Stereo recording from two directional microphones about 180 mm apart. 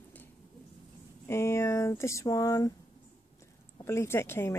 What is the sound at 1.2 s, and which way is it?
Speech, 15° left (ahead or behind).